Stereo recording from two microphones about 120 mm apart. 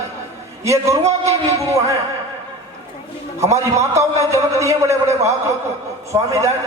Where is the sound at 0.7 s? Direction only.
25° right (ahead or behind).